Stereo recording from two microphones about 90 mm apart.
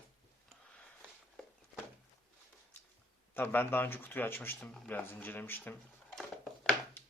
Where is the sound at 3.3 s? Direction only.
25° left (ahead or behind).